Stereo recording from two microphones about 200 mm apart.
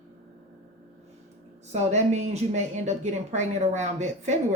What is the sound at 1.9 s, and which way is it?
A woman's voice, 35° right (ahead or behind).